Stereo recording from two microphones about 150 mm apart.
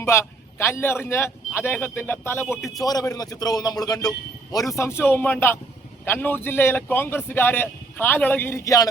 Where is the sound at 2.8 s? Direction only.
25° left (ahead or behind).